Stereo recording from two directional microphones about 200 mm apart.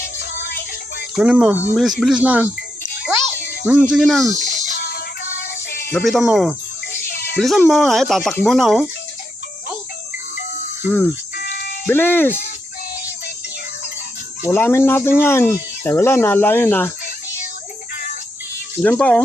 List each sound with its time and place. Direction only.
1.1 s speech: 5° right (ahead or behind)
3.7 s speech: 5° right (ahead or behind)
4.4 s music: 50° left (ahead or behind)
5.9 s speech: centre (ahead or behind)
11.9 s speech: 10° left (ahead or behind)
14.5 s speech: 10° left (ahead or behind)
18.8 s speech: 5° left (ahead or behind)